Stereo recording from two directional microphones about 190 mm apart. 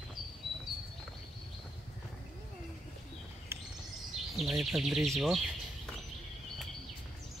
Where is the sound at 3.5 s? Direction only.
10° right (ahead or behind).